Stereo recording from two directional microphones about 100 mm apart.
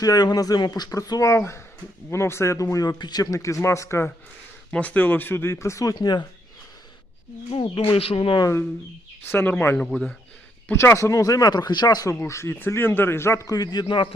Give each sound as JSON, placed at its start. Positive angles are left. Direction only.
{"t": 0.0, "sound": "speech", "side_deg": 40}
{"t": 1.3, "sound": "a man's voice", "side_deg": 25}
{"t": 4.7, "sound": "a man's voice", "side_deg": 15}
{"t": 5.9, "sound": "speech", "side_deg": 45}
{"t": 7.5, "sound": "speech", "side_deg": 65}
{"t": 9.2, "sound": "a man's voice", "side_deg": 20}
{"t": 10.7, "sound": "speech", "side_deg": 25}
{"t": 12.2, "sound": "a man's voice", "side_deg": 25}
{"t": 13.8, "sound": "speech", "side_deg": 55}